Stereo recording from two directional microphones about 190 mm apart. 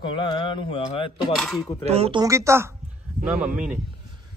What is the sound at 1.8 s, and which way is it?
Speech, 35° right (ahead or behind).